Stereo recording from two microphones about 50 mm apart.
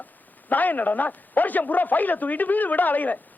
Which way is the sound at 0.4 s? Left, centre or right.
Left.